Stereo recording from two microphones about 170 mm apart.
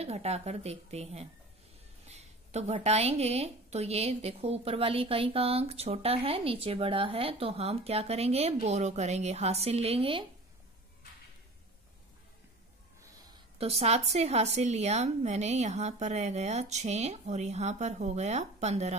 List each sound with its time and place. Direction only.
0.0 s a woman's voice: 40° right (ahead or behind)
13.6 s a woman's voice: 35° right (ahead or behind)